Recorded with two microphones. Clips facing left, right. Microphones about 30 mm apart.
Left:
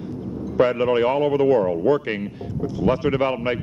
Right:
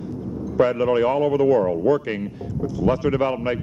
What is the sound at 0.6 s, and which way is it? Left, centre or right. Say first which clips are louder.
Speech: even; left.